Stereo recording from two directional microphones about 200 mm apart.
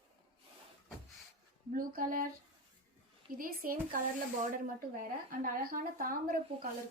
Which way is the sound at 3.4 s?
45° right (ahead or behind).